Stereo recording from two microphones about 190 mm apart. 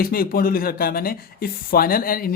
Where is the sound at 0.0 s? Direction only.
50° left (ahead or behind).